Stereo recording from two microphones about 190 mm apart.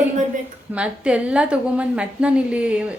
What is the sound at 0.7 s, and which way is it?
A woman's voice, 5° right (ahead or behind).